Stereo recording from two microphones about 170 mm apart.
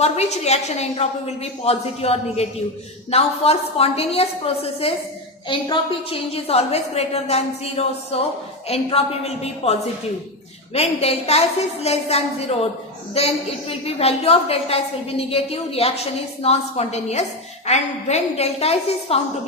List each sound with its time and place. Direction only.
0.0 s a woman's voice: 40° left (ahead or behind)
10.8 s a woman's voice: 35° left (ahead or behind)